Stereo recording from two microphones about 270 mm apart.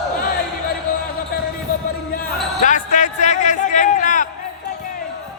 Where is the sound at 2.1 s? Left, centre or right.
Left.